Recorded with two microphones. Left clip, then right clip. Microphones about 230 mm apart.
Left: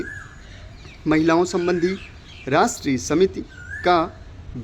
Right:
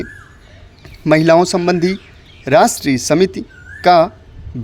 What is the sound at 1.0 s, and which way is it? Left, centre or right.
Speech, right.